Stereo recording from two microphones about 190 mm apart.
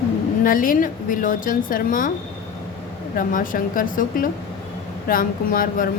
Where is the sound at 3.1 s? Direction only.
45° left (ahead or behind).